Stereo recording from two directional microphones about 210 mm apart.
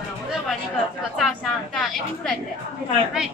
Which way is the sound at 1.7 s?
Centre (ahead or behind).